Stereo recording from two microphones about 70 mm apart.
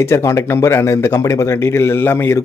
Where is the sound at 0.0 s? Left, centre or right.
Left.